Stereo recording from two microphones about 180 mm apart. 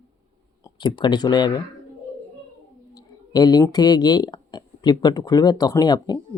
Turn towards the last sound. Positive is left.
turn(degrees=25)  # may be behind; listen again after turning